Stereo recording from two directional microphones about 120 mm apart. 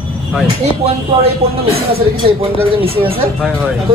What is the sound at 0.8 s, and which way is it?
A woman's voice, 55° right (ahead or behind).